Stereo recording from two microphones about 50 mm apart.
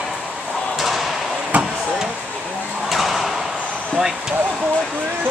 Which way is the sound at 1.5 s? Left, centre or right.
Right.